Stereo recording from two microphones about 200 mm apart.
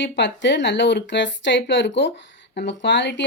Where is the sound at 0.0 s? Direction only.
65° left (ahead or behind).